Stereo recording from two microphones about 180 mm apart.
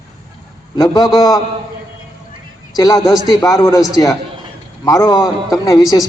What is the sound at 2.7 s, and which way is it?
A man's voice, 20° left (ahead or behind).